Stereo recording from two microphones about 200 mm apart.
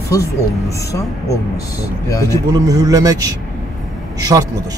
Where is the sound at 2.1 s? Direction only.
15° left (ahead or behind).